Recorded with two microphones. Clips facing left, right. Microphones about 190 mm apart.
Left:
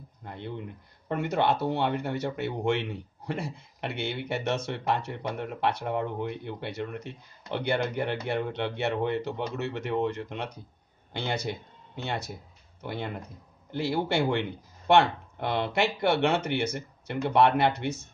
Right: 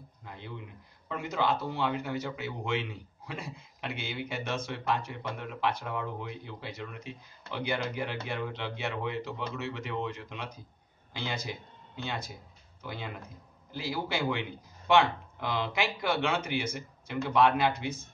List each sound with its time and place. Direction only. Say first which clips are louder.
0.2 s speech: left 6 dB; 60° left (ahead or behind)